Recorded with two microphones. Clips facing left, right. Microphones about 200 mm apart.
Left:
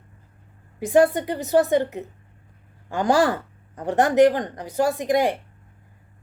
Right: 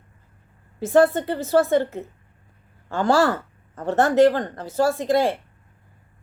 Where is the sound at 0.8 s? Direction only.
15° left (ahead or behind).